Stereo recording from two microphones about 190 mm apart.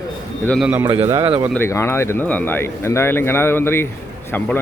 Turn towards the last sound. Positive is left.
turn(degrees=10)  # may be behind; listen again after turning